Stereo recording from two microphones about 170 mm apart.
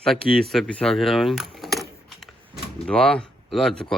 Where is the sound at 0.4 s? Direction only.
5° left (ahead or behind).